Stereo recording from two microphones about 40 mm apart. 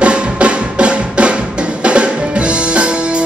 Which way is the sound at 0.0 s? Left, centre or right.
Right.